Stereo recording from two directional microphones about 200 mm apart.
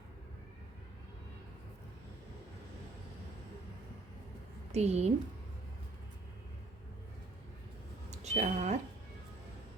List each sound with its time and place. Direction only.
4.7 s a woman's voice: 35° right (ahead or behind)
8.1 s speech: 35° right (ahead or behind)